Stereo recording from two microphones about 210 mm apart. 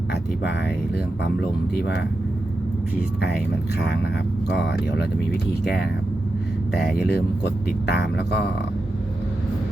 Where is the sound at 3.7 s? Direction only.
50° left (ahead or behind).